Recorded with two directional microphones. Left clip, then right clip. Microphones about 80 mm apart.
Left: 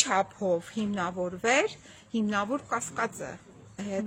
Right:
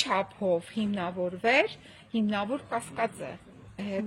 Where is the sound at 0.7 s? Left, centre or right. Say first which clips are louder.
Left 1 dB; left.